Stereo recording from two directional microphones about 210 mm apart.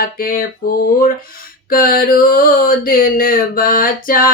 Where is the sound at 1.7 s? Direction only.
45° left (ahead or behind).